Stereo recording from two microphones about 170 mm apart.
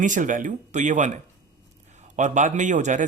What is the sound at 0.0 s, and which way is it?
A man's voice, 50° right (ahead or behind).